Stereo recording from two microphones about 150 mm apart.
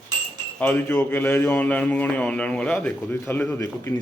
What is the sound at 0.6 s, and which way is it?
A man's voice, 15° left (ahead or behind).